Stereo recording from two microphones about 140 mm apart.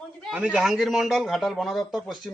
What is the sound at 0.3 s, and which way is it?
A man's voice, 5° right (ahead or behind).